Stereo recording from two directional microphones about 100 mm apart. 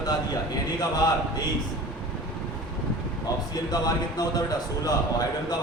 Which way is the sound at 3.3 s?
40° left (ahead or behind).